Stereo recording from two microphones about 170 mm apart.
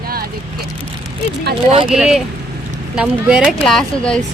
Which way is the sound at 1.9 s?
5° right (ahead or behind).